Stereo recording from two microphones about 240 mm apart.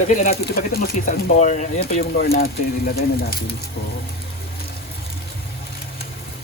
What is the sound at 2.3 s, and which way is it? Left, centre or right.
Speech, left.